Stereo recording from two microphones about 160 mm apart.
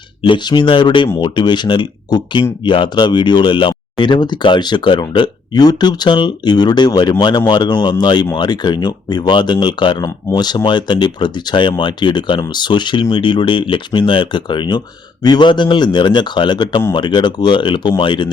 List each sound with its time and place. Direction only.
0.2 s speech: 30° left (ahead or behind)